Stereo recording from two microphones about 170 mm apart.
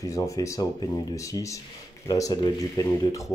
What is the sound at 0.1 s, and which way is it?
Speech, 20° left (ahead or behind).